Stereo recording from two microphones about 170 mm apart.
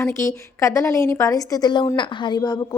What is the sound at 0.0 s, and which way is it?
A woman's voice, 15° left (ahead or behind).